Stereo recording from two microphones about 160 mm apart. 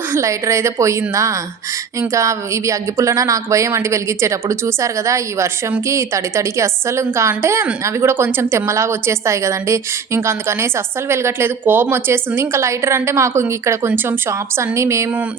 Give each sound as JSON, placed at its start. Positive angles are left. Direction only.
{"t": 0.1, "sound": "a woman's voice", "side_deg": -20}